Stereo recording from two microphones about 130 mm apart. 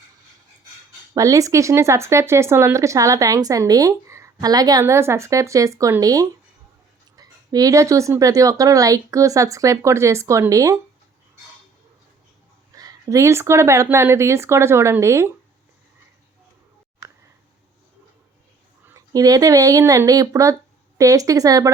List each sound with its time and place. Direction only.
1.1 s speech: 25° right (ahead or behind)
12.7 s speech: 30° right (ahead or behind)
18.9 s speech: 25° right (ahead or behind)